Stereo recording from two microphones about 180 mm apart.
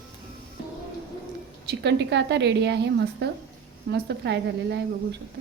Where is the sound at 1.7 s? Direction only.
70° right (ahead or behind).